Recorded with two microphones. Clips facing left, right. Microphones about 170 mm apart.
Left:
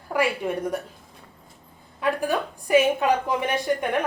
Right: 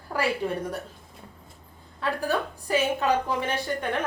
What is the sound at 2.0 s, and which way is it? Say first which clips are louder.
A woman's voice: left 3 dB; 15° left (ahead or behind).